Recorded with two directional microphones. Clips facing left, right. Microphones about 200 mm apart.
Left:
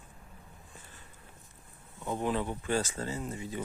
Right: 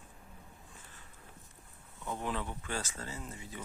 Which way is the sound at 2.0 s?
30° left (ahead or behind).